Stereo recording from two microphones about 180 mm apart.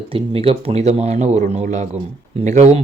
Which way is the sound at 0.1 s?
30° right (ahead or behind).